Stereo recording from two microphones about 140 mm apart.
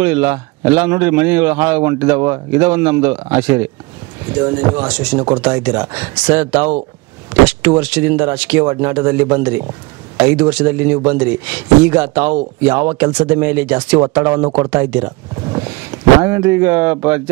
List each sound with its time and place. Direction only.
0.0 s a man's voice: 15° right (ahead or behind)
4.4 s speech: 30° right (ahead or behind)
4.7 s a man's voice: 15° right (ahead or behind)
16.2 s speech: 20° right (ahead or behind)